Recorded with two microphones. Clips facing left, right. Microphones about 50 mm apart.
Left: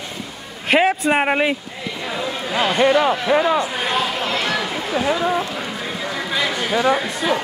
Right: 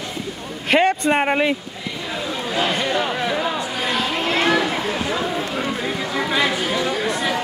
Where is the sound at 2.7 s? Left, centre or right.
Left.